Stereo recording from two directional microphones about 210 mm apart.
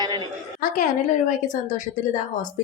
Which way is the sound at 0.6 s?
40° left (ahead or behind).